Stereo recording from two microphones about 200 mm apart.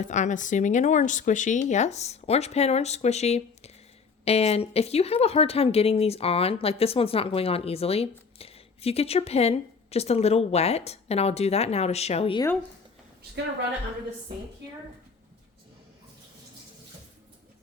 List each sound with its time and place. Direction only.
0.0 s a woman's voice: 35° left (ahead or behind)